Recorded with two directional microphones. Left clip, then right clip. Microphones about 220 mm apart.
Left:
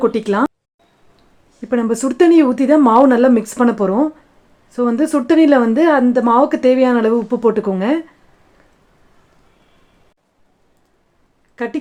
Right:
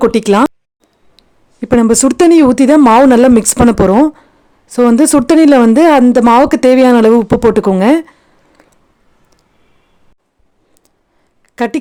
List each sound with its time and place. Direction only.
0.0 s speech: 50° right (ahead or behind)
1.6 s speech: 50° right (ahead or behind)
11.5 s speech: 55° right (ahead or behind)